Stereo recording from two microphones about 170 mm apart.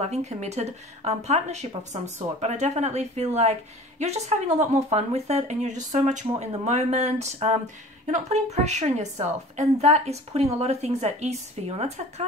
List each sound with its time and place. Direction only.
0.0 s a woman's voice: 40° right (ahead or behind)